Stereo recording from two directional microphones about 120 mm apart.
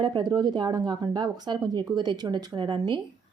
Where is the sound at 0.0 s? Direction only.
35° right (ahead or behind).